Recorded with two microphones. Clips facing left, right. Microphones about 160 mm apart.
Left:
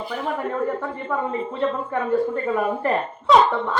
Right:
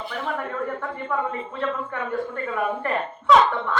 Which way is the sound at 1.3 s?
30° left (ahead or behind).